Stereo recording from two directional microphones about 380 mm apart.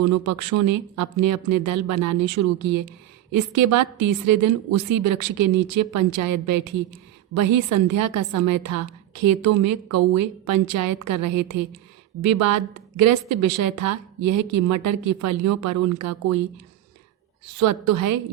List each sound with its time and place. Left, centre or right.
0.0 s speech: right
3.6 s speech: right
17.6 s speech: right